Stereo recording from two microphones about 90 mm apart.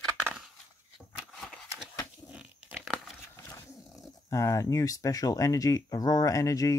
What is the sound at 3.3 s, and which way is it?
Roaring cats, 30° left (ahead or behind).